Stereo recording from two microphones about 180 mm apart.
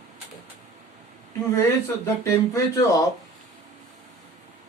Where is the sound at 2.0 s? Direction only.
15° left (ahead or behind).